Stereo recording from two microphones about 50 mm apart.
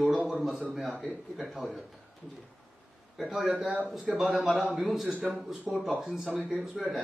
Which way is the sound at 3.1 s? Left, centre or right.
Centre.